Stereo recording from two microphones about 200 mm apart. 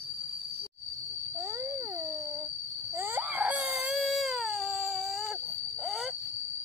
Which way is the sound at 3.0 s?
10° right (ahead or behind).